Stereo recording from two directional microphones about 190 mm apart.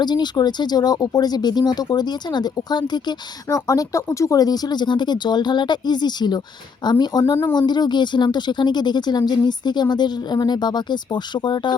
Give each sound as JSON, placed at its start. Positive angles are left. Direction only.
{"t": 0.0, "sound": "speech", "side_deg": 20}